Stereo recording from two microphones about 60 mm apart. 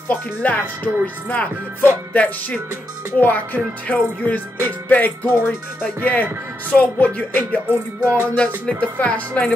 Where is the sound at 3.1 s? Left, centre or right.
Left.